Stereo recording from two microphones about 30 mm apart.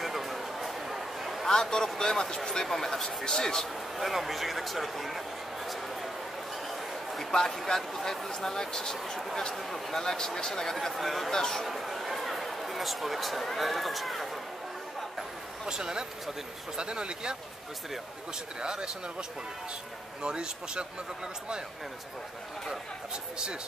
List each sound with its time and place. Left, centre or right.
0.0 s a sound: centre
1.5 s speech: left
2.6 s speech: centre
4.0 s speech: centre
7.2 s speech: centre
10.9 s speech: centre
11.3 s speech: centre
11.6 s speech: centre
15.6 s speech: right
18.6 s speech: right
20.2 s speech: right